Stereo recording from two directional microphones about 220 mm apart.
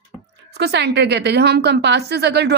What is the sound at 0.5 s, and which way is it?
A woman's voice, 50° right (ahead or behind).